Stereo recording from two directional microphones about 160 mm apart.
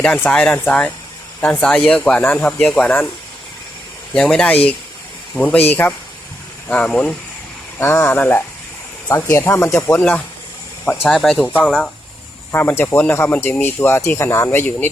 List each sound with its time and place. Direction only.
0.0 s speech: 10° left (ahead or behind)
4.1 s speech: 5° left (ahead or behind)
6.7 s speech: 5° left (ahead or behind)